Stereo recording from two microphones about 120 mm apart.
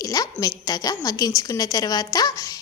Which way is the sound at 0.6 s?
30° left (ahead or behind).